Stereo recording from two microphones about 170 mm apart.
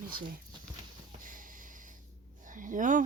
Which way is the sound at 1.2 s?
50° right (ahead or behind).